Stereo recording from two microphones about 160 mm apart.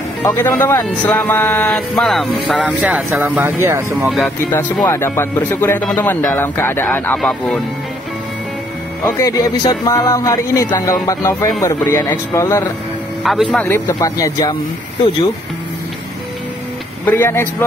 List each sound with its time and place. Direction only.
0.2 s speech: 10° left (ahead or behind); by 4.1 s 15° right (ahead or behind)
4.1 s speech: 5° left (ahead or behind)
4.8 s speech: 15° left (ahead or behind)
9.2 s music: 25° left (ahead or behind)
13.2 s speech: centre (ahead or behind)
13.8 s music: 25° left (ahead or behind)
17.0 s speech: 15° left (ahead or behind)